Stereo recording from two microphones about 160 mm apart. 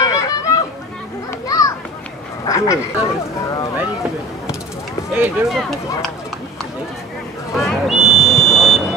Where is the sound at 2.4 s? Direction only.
20° left (ahead or behind).